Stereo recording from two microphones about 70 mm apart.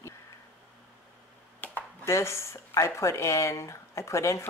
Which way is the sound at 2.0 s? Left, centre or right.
Left.